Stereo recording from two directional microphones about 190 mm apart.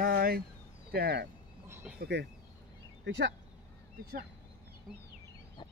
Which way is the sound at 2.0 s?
60° right (ahead or behind).